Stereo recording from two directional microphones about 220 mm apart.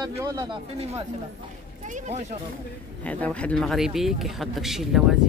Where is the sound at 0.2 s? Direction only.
20° right (ahead or behind).